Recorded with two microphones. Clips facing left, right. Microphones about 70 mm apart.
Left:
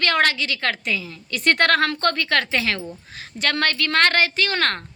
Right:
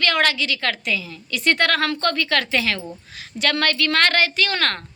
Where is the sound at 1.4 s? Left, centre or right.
Left.